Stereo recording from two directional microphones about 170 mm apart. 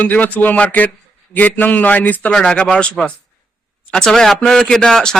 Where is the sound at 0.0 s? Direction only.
10° left (ahead or behind).